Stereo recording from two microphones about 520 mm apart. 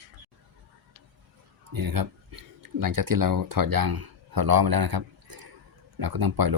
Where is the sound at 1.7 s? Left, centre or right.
Right.